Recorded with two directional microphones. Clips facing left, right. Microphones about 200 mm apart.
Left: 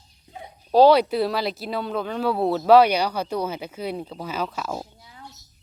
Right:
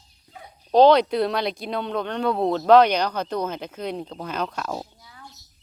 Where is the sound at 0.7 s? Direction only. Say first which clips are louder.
Even; 5° left (ahead or behind).